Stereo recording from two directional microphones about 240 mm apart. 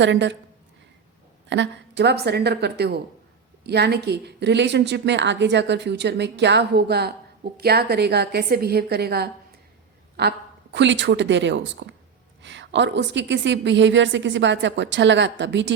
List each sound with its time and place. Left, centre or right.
0.0 s a woman's voice: right
1.5 s a woman's voice: right